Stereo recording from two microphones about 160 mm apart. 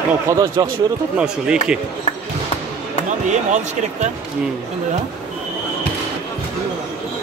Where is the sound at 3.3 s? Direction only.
50° right (ahead or behind).